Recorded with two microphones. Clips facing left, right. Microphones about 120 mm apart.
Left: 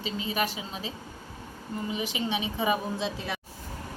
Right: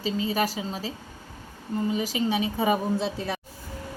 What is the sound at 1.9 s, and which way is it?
A woman's voice, 40° right (ahead or behind).